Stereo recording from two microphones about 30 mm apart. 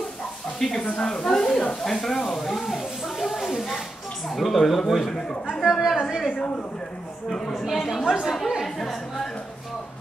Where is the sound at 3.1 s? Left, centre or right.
Centre.